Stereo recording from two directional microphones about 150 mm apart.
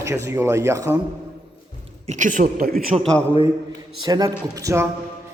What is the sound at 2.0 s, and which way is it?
Speech, 55° right (ahead or behind).